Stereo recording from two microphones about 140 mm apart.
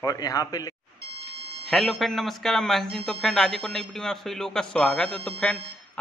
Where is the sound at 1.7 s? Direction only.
Centre (ahead or behind).